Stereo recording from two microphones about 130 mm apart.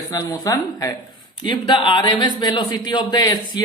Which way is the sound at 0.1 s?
25° left (ahead or behind).